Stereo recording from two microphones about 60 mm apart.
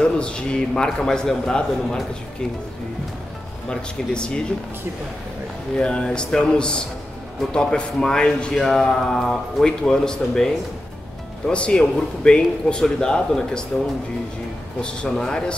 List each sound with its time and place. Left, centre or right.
0.0 s a man's voice: centre
3.6 s a man's voice: centre
5.8 s a man's voice: centre
8.5 s mantra: centre
8.8 s a man's voice: centre
15.0 s a man's voice: centre